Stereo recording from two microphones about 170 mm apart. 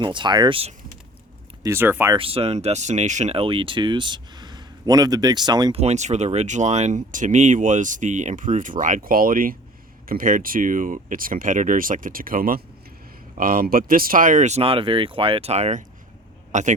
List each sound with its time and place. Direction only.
0.0 s speech: 25° right (ahead or behind)
1.6 s speech: 15° right (ahead or behind)
2.1 s speech: 35° right (ahead or behind)
5.8 s speech: 40° right (ahead or behind)